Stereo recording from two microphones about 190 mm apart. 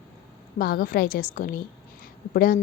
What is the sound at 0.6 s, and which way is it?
A woman's voice, 50° left (ahead or behind).